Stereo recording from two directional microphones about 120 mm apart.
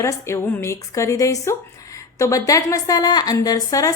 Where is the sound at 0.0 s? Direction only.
25° left (ahead or behind).